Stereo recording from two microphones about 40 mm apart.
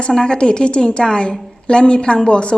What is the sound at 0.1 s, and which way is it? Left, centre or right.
A woman's voice, centre.